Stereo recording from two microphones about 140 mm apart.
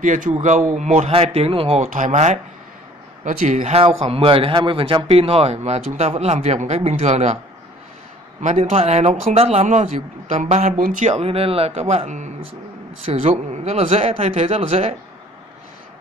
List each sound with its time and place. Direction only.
0.0 s speech: 65° right (ahead or behind); by 1.8 s 45° right (ahead or behind)
1.8 s speech: 60° right (ahead or behind)
3.8 s a man's voice: 40° right (ahead or behind)
8.4 s speech: 50° right (ahead or behind)
10.8 s speech: 70° right (ahead or behind); by 15.0 s 45° right (ahead or behind)